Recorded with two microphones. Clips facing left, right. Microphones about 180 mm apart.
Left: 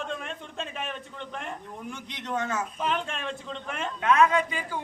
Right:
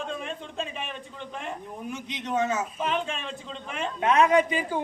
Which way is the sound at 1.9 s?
20° right (ahead or behind).